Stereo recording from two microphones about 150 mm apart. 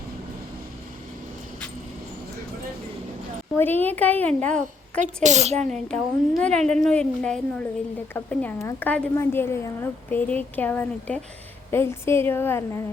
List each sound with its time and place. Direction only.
3.5 s speech: 15° left (ahead or behind)
4.9 s a woman's voice: 55° right (ahead or behind)
5.5 s a woman's voice: 5° left (ahead or behind)